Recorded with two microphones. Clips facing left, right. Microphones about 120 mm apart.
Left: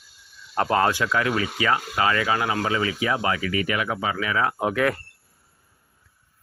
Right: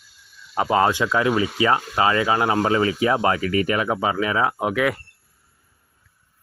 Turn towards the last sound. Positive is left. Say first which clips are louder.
# right 1 dB
turn(degrees=-10)  # may be behind; listen again after turning